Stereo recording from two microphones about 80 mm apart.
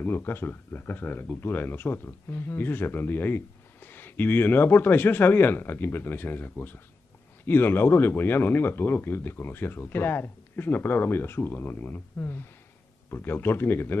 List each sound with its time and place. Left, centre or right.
0.0 s speech: left